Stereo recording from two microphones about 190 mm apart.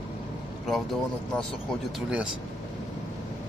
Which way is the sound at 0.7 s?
Centre (ahead or behind).